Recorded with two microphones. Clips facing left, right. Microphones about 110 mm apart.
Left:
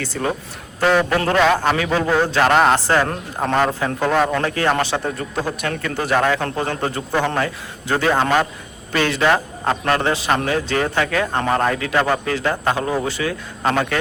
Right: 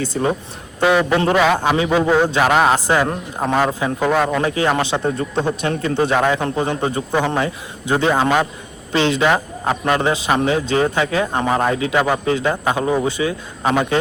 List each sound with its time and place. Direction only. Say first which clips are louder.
0.0 s a man's voice: right 3 dB; 20° right (ahead or behind); by 2.8 s 5° right (ahead or behind)
2.8 s a man's voice: right 1 dB; 15° right (ahead or behind)
4.4 s a man's voice: right 1 dB; 15° right (ahead or behind)
8.2 s a man's voice: right 1 dB; 5° right (ahead or behind)
8.9 s a man's voice: right 1 dB; 20° right (ahead or behind)
11.7 s a man's voice: right 3 dB; 25° right (ahead or behind)
11.9 s a man's voice: even; 10° right (ahead or behind)
12.2 s a man's voice: right 2 dB; 20° right (ahead or behind)